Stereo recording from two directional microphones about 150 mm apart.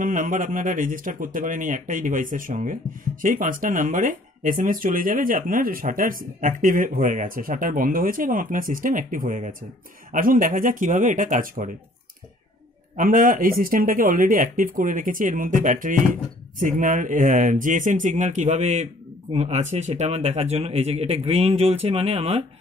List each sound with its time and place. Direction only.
0.0 s speech: 60° right (ahead or behind)
12.9 s speech: 65° right (ahead or behind); by 22.4 s 40° right (ahead or behind)